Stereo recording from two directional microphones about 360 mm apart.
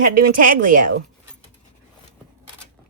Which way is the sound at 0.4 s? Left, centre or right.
Right.